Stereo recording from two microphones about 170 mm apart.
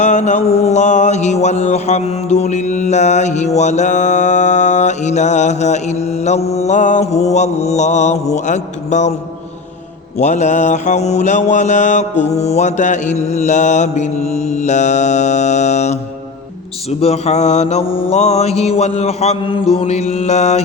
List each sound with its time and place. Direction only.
0.0 s mantra: 45° left (ahead or behind)
10.2 s mantra: 45° left (ahead or behind)
17.0 s mantra: 40° left (ahead or behind)